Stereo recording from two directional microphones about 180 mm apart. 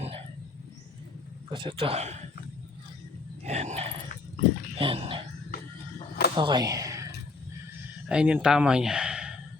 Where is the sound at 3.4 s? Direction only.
40° right (ahead or behind).